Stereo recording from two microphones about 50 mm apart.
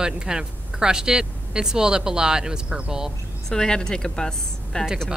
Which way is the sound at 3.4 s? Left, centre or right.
Centre.